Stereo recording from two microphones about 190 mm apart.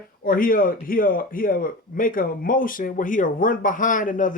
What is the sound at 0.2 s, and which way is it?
A man's voice, 50° left (ahead or behind).